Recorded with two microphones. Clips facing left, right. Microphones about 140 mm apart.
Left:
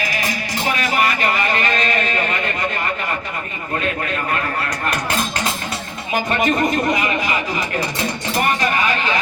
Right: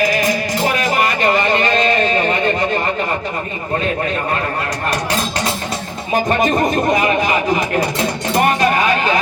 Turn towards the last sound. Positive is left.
turn(degrees=-45)  # may be behind; listen again after turning